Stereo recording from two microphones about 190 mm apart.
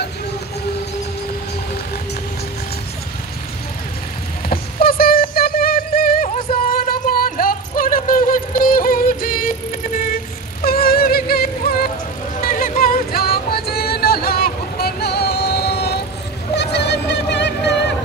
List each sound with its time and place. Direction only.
4.5 s synthetic singing: 50° left (ahead or behind)
6.2 s music: 45° left (ahead or behind)
16.5 s a sound: 60° left (ahead or behind)